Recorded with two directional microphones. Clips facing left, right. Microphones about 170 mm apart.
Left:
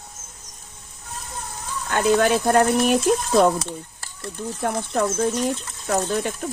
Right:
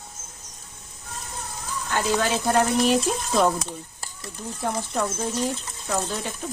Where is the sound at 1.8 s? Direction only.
55° left (ahead or behind).